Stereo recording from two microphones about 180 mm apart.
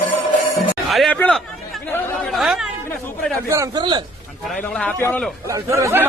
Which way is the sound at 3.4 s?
15° right (ahead or behind).